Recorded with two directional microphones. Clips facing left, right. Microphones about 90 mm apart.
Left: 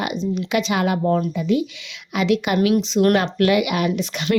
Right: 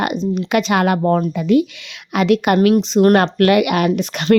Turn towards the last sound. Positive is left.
turn(degrees=-50)  # may be behind; listen again after turning